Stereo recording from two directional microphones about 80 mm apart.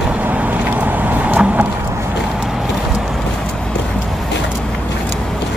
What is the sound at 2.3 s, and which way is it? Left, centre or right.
Vehicle, centre.